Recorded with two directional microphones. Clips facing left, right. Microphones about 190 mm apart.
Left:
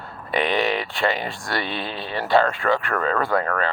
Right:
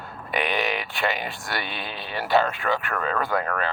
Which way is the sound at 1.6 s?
30° left (ahead or behind).